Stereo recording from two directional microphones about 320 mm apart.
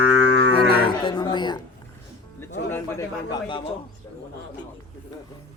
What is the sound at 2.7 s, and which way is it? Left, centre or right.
Speech, centre.